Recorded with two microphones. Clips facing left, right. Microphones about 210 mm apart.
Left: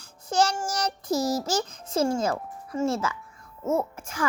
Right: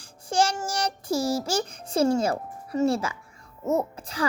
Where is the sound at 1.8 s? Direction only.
30° right (ahead or behind).